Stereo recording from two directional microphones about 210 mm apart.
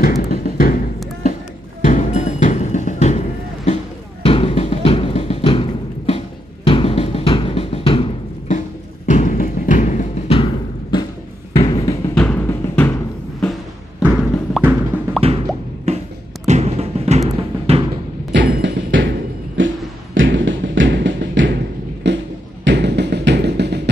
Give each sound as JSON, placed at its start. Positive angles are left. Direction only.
{"t": 0.0, "sound": "a sound", "side_deg": 45}
{"t": 1.9, "sound": "music", "side_deg": 35}
{"t": 4.2, "sound": "music", "side_deg": 25}
{"t": 12.2, "sound": "music", "side_deg": 5}
{"t": 13.9, "sound": "music", "side_deg": -5}
{"t": 15.1, "sound": "plop", "side_deg": -25}
{"t": 16.4, "sound": "music", "side_deg": -30}
{"t": 18.3, "sound": "music", "side_deg": -55}
{"t": 19.6, "sound": "beatboxing", "side_deg": -65}
{"t": 20.2, "sound": "tap", "side_deg": -60}
{"t": 22.0, "sound": "a sound", "side_deg": -55}
{"t": 22.7, "sound": "music", "side_deg": -55}